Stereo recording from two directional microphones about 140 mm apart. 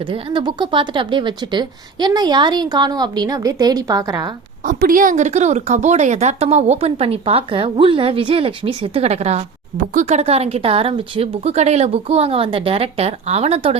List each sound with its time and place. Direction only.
0.0 s speech: 40° right (ahead or behind)
4.6 s speech: 75° right (ahead or behind); by 9.4 s 50° right (ahead or behind)
9.7 s speech: 65° right (ahead or behind); by 13.7 s 45° right (ahead or behind)